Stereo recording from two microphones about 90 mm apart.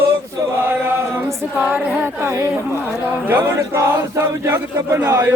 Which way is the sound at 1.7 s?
25° right (ahead or behind).